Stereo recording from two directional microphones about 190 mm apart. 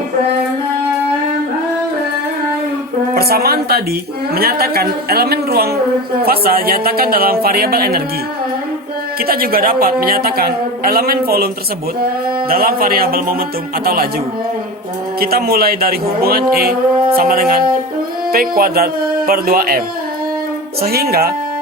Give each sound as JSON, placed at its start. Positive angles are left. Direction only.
{"t": 3.2, "sound": "a woman's voice", "side_deg": -55}
{"t": 9.2, "sound": "a woman's voice", "side_deg": -50}
{"t": 12.5, "sound": "a woman's voice", "side_deg": -50}
{"t": 15.2, "sound": "a woman's voice", "side_deg": -55}
{"t": 20.8, "sound": "a woman's voice", "side_deg": -55}